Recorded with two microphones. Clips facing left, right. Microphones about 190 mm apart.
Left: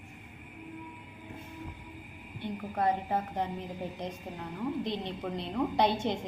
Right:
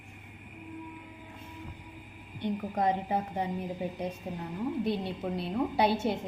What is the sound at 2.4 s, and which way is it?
A woman's voice, 15° right (ahead or behind).